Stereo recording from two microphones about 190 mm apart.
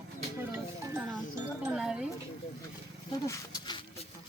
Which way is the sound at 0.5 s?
10° right (ahead or behind).